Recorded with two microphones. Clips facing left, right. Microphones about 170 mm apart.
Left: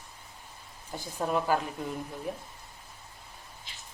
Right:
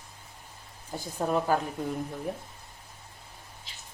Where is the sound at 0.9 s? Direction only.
20° right (ahead or behind).